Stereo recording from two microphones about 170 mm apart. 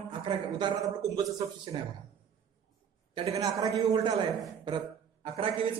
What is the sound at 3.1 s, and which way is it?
A woman's voice, 35° right (ahead or behind).